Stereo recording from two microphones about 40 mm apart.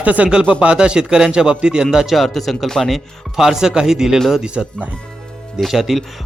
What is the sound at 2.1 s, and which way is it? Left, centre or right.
Speech, centre.